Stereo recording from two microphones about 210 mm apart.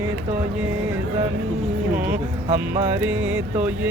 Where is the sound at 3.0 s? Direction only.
5° right (ahead or behind).